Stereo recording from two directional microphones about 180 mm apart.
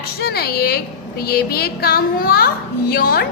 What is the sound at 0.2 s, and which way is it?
A woman's voice, 60° left (ahead or behind).